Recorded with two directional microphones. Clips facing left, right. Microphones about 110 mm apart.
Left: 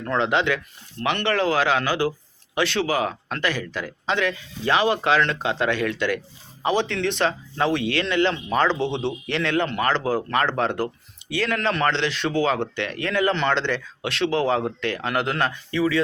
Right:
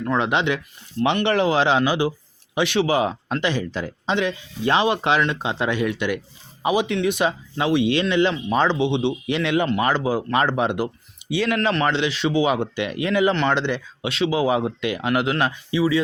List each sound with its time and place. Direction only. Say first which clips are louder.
0.0 s speech: right 1 dB; 15° right (ahead or behind)